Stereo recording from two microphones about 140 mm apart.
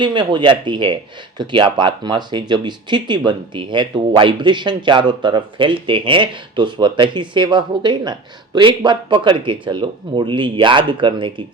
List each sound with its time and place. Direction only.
0.0 s speech: 35° right (ahead or behind)